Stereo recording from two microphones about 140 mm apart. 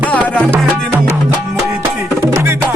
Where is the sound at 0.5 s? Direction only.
15° right (ahead or behind).